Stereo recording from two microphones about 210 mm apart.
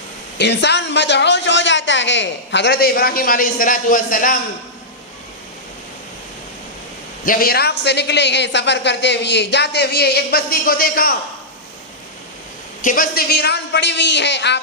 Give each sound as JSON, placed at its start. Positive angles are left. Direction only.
{"t": 0.3, "sound": "a man's voice", "side_deg": 55}
{"t": 7.3, "sound": "a man's voice", "side_deg": 45}
{"t": 12.8, "sound": "a man's voice", "side_deg": 40}